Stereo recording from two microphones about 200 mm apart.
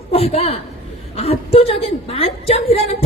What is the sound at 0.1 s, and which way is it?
A woman's voice, 30° left (ahead or behind).